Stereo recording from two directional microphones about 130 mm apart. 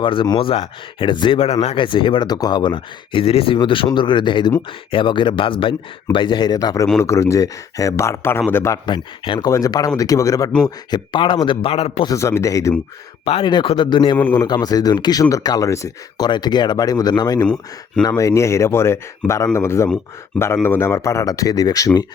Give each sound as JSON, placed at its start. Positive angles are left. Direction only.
{"t": 0.0, "sound": "speech", "side_deg": 40}
{"t": 8.9, "sound": "speech", "side_deg": 40}
{"t": 9.5, "sound": "speech", "side_deg": 25}
{"t": 10.9, "sound": "speech", "side_deg": 40}
{"t": 12.0, "sound": "speech", "side_deg": 25}
{"t": 13.2, "sound": "speech", "side_deg": 45}
{"t": 14.2, "sound": "a man's voice", "side_deg": 15}
{"t": 14.4, "sound": "speech", "side_deg": 30}
{"t": 17.4, "sound": "speech", "side_deg": 5}
{"t": 18.2, "sound": "speech", "side_deg": 25}